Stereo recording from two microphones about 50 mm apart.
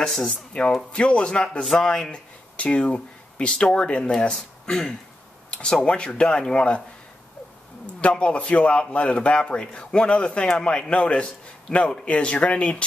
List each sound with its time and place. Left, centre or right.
0.0 s a man's voice: centre
7.8 s a man's voice: left